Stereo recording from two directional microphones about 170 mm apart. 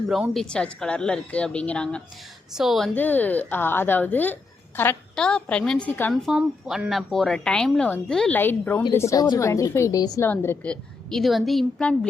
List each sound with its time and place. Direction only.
0.1 s a woman's voice: centre (ahead or behind)